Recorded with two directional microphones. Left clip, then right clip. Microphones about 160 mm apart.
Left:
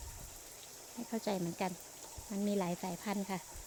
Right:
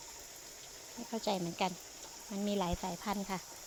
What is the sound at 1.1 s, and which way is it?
Speech, 25° left (ahead or behind).